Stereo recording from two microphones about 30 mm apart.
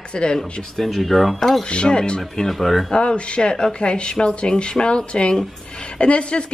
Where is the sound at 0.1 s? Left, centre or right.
Left.